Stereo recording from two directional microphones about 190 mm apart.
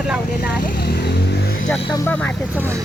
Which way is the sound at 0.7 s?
55° left (ahead or behind).